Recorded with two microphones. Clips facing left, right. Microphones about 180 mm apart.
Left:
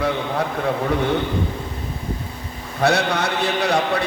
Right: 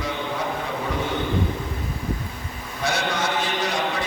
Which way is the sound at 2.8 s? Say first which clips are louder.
Left 6 dB; 65° left (ahead or behind).